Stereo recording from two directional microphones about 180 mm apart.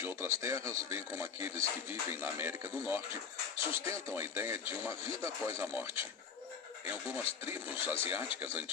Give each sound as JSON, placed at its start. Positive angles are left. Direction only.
{"t": 0.0, "sound": "speech", "side_deg": -10}